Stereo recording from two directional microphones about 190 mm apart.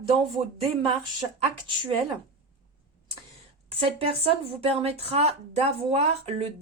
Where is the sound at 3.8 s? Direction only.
30° right (ahead or behind).